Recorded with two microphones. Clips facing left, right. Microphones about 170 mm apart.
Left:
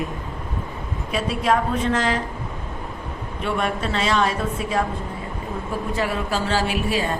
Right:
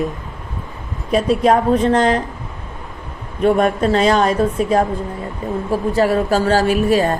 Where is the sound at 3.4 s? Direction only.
40° right (ahead or behind).